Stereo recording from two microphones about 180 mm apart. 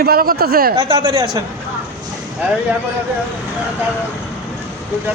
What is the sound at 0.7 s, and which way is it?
Speech, 30° right (ahead or behind).